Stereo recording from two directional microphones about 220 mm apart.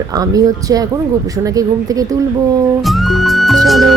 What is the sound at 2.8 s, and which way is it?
Music, centre (ahead or behind).